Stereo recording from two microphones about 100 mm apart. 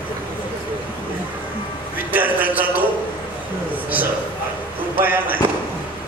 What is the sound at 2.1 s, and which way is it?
Speech, 15° right (ahead or behind).